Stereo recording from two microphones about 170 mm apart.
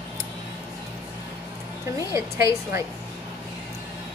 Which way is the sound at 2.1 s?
15° right (ahead or behind).